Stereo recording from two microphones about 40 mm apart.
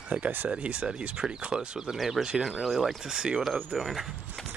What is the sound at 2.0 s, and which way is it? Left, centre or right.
Speech, centre.